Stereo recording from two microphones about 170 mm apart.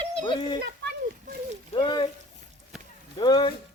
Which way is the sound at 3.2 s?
25° left (ahead or behind).